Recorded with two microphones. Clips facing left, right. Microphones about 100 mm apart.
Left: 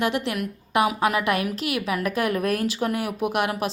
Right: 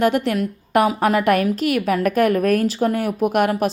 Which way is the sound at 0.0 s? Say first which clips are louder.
Right 7 dB; 45° right (ahead or behind).